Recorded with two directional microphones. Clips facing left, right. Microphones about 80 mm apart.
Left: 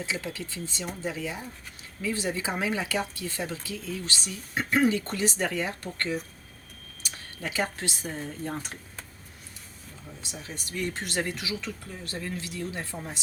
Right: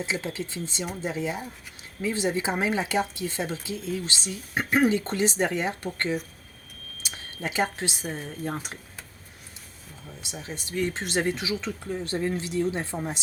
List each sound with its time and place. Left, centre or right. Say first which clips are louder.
0.0 s a woman's voice: right 3 dB; right
7.0 s a sound: right 3 dB; right
8.0 s speech: right 2 dB; centre
10.5 s a woman's voice: right 4 dB; right